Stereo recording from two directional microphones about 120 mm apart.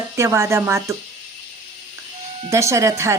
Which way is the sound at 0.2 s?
25° right (ahead or behind).